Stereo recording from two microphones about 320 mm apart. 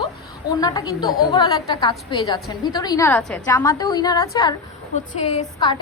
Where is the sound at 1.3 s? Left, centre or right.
Centre.